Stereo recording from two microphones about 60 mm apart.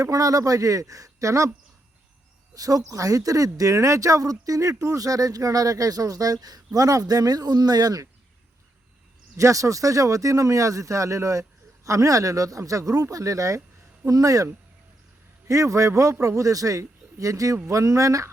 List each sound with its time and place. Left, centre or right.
0.0 s speech: right
2.6 s speech: right
6.7 s speech: right
9.4 s speech: right
14.0 s speech: right
15.4 s speech: right